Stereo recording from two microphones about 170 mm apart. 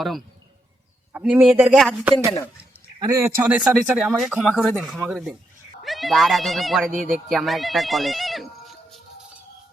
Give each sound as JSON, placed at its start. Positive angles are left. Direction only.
{"t": 1.1, "sound": "speech", "side_deg": -10}
{"t": 3.0, "sound": "speech", "side_deg": -20}
{"t": 3.4, "sound": "speech", "side_deg": -10}